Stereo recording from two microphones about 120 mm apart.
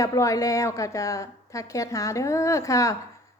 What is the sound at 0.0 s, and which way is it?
A woman's voice, 25° left (ahead or behind).